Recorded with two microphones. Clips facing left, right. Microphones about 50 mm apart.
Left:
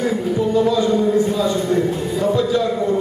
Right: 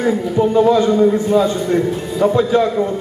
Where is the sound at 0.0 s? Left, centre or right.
Right.